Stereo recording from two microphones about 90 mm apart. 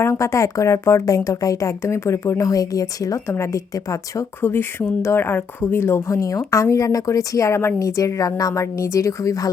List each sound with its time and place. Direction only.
0.0 s speech: 35° left (ahead or behind)
3.2 s speech: 30° left (ahead or behind)
5.0 s speech: 25° left (ahead or behind)